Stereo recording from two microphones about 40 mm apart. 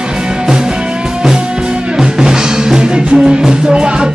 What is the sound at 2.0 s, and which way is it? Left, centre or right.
Music, centre.